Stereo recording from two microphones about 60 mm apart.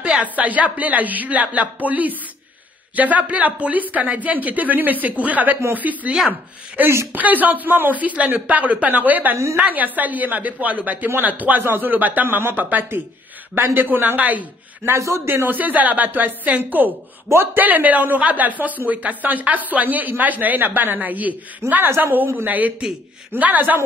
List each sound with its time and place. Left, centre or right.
0.0 s speech: right
6.8 s speech: right
7.1 s a man's voice: right
15.0 s a man's voice: right
15.2 s a man's voice: right
17.3 s a man's voice: right
17.6 s a man's voice: right